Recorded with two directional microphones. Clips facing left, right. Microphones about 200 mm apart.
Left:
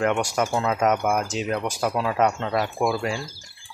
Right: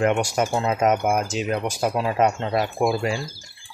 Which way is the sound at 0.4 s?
20° right (ahead or behind).